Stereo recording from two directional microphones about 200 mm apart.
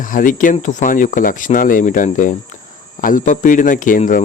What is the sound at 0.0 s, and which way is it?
Speech, 40° left (ahead or behind).